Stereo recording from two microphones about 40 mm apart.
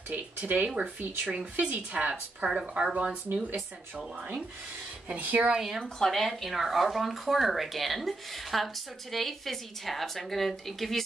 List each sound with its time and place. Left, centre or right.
0.1 s speech: right
1.2 s speech: right
1.6 s a woman's voice: right
2.5 s speech: right
5.0 s a woman's voice: right
5.5 s a woman's voice: centre
5.9 s speech: centre